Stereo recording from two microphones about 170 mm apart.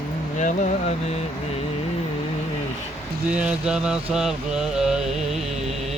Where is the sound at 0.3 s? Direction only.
45° left (ahead or behind).